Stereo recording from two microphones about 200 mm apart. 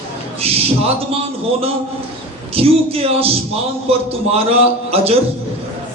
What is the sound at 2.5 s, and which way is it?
Speech, 30° right (ahead or behind).